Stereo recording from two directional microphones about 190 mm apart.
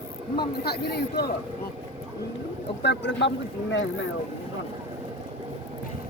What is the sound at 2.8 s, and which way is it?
Speech, 65° left (ahead or behind).